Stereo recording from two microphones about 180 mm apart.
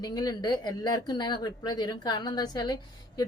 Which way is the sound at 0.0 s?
20° left (ahead or behind).